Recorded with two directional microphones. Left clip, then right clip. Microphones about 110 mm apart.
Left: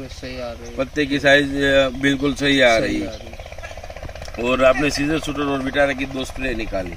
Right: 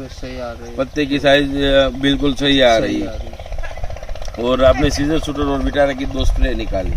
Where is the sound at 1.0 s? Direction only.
Centre (ahead or behind).